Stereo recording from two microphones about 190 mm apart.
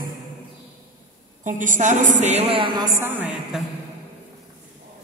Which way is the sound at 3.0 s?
10° right (ahead or behind).